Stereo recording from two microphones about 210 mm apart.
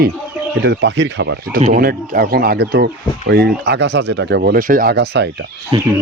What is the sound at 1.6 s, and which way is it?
Speech, 40° right (ahead or behind).